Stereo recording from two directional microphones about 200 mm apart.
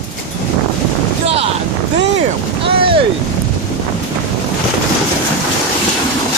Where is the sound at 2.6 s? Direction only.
25° right (ahead or behind).